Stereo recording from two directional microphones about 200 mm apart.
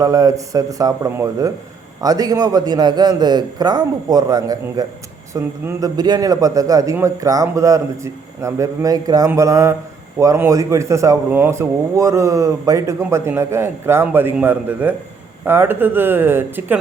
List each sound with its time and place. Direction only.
0.0 s a man's voice: 15° right (ahead or behind)